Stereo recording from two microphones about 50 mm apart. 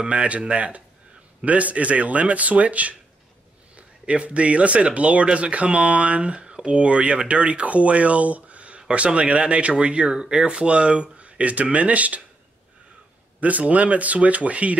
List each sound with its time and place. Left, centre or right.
0.0 s speech: right
13.4 s speech: right